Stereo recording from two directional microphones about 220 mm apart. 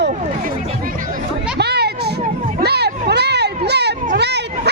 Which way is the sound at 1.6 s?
50° right (ahead or behind).